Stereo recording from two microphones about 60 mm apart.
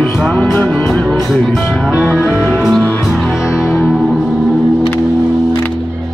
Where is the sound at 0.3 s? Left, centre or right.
Left.